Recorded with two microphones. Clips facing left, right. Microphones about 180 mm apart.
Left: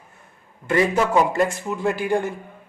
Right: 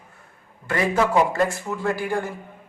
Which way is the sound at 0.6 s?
20° left (ahead or behind).